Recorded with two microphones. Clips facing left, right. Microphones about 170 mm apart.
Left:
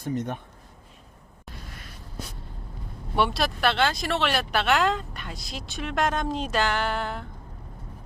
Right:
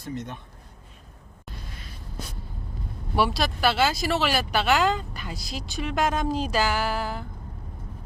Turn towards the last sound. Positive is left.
turn(degrees=0)  # may be behind; listen again after turning